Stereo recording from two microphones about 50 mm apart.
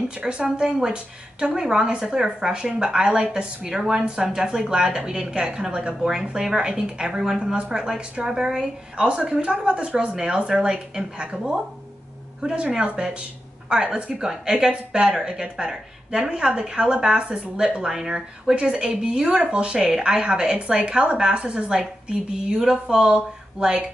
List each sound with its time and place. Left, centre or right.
0.2 s a woman's voice: centre